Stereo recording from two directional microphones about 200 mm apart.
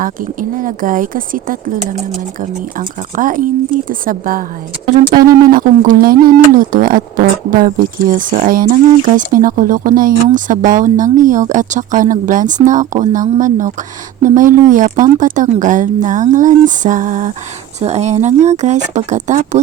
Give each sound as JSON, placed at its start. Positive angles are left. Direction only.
{"t": 0.0, "sound": "speech", "side_deg": -45}
{"t": 5.5, "sound": "speech", "side_deg": -45}